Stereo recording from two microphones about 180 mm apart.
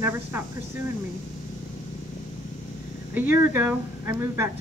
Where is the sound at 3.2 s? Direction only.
10° right (ahead or behind).